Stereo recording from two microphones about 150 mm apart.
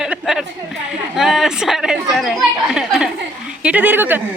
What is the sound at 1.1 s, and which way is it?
A woman's voice, centre (ahead or behind).